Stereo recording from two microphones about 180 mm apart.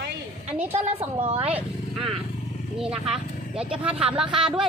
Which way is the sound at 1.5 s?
5° right (ahead or behind).